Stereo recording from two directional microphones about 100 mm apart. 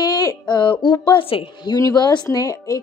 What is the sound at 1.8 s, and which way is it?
A woman's voice, 40° left (ahead or behind).